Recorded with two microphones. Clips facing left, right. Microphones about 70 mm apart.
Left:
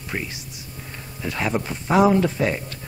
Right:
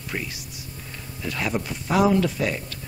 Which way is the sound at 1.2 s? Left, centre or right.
Left.